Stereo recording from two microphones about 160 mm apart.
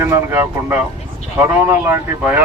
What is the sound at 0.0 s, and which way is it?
Speech, 15° right (ahead or behind).